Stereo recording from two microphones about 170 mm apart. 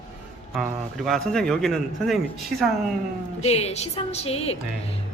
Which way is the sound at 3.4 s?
40° left (ahead or behind).